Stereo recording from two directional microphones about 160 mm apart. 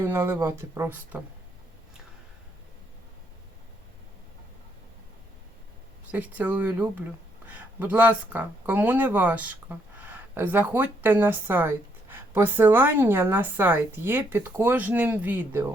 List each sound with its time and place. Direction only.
0.0 s speech: 15° right (ahead or behind)
6.1 s speech: 10° right (ahead or behind)